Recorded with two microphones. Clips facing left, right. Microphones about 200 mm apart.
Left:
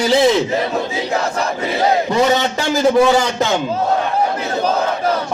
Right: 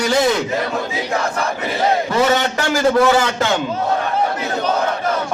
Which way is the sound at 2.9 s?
15° left (ahead or behind).